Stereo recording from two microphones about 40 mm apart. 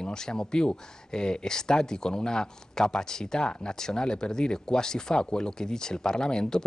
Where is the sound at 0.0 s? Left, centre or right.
Centre.